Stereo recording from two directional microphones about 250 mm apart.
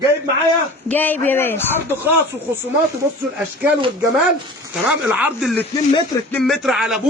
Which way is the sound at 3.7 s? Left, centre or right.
Centre.